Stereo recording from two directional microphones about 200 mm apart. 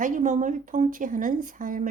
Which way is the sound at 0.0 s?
40° right (ahead or behind).